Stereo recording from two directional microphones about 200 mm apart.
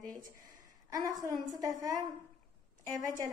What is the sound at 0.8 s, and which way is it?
Speech, 15° right (ahead or behind).